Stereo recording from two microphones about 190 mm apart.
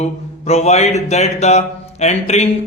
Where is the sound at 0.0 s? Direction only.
35° left (ahead or behind).